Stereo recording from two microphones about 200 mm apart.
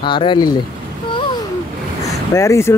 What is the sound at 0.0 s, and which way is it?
Speech, 25° left (ahead or behind).